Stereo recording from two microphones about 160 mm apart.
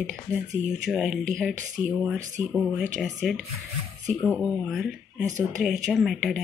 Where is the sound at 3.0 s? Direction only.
Centre (ahead or behind).